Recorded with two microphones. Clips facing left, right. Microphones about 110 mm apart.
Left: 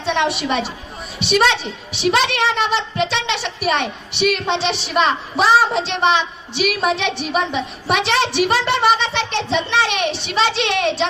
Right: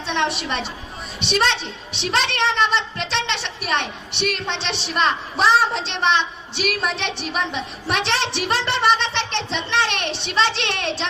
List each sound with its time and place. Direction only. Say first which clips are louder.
0.0 s a woman's voice: left 4 dB; 5° left (ahead or behind)